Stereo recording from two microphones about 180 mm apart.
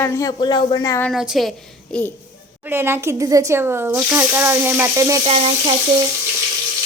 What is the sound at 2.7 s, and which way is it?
Speech, 10° right (ahead or behind).